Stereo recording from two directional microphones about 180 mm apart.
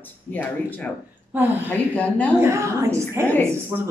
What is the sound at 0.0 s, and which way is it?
Speech, 10° left (ahead or behind).